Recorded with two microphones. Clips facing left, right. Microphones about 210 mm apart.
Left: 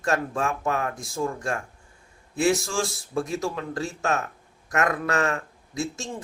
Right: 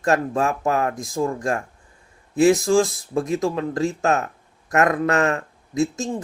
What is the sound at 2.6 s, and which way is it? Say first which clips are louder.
Speech: right 11 dB; 35° right (ahead or behind).